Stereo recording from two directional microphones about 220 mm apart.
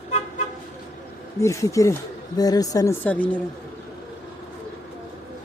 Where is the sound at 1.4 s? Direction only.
15° left (ahead or behind).